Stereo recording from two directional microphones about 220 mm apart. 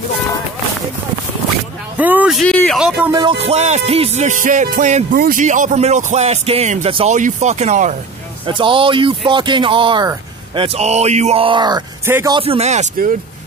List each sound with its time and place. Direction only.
2.0 s speech: 5° right (ahead or behind)
3.1 s speech: 20° right (ahead or behind)
3.4 s music: 30° right (ahead or behind)
8.5 s speech: 20° right (ahead or behind)
12.4 s speech: 25° right (ahead or behind)